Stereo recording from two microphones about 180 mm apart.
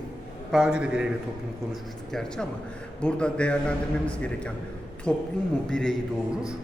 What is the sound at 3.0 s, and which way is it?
A man's voice, 5° left (ahead or behind).